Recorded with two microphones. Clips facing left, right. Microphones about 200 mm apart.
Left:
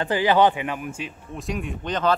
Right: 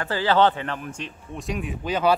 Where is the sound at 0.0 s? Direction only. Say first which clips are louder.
Left 1 dB; 15° left (ahead or behind).